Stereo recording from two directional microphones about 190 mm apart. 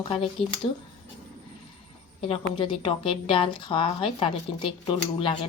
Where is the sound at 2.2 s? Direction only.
30° left (ahead or behind).